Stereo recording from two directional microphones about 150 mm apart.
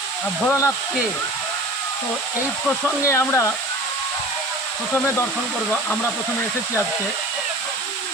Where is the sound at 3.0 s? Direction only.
20° left (ahead or behind).